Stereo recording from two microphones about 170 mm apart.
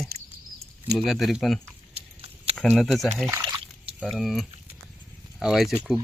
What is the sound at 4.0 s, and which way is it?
Speech, centre (ahead or behind).